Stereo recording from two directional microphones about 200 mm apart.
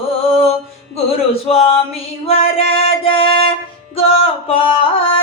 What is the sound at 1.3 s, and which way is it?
Music, 30° left (ahead or behind).